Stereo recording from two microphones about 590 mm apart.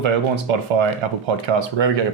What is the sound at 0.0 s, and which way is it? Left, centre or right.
Speech, right.